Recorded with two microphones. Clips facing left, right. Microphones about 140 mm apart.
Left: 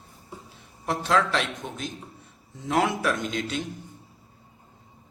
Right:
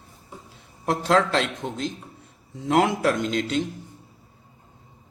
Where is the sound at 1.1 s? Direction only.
30° right (ahead or behind).